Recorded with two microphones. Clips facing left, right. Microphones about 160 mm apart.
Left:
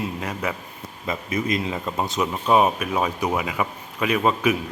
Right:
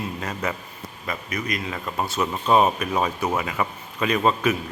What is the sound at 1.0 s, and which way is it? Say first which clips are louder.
A man's voice: left 4 dB; 25° left (ahead or behind).